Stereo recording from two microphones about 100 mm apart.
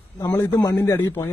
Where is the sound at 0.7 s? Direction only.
20° left (ahead or behind).